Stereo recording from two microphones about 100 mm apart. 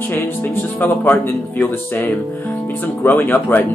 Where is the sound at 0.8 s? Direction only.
20° left (ahead or behind).